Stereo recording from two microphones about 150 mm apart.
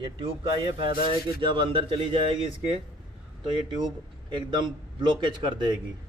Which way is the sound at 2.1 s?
45° left (ahead or behind).